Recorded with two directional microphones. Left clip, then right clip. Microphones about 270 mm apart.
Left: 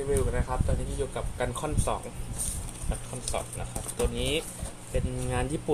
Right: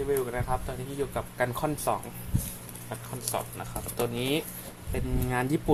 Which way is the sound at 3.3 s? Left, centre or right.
Right.